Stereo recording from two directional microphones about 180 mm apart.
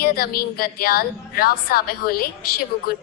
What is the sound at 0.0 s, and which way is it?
A woman's voice, 55° left (ahead or behind).